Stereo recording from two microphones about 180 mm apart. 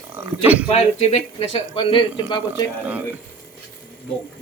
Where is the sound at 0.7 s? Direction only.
35° left (ahead or behind).